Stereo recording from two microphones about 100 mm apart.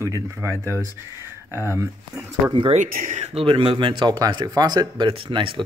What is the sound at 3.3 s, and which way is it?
Speech, 65° right (ahead or behind).